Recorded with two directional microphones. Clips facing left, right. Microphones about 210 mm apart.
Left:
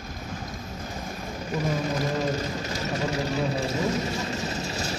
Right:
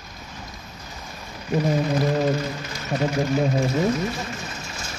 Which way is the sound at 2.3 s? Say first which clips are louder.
Right 2 dB; 40° left (ahead or behind).